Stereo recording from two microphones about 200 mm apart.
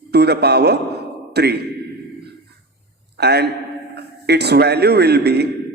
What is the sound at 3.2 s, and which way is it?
A man's voice, 55° right (ahead or behind).